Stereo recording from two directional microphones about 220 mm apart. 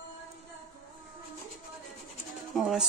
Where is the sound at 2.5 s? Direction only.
Centre (ahead or behind).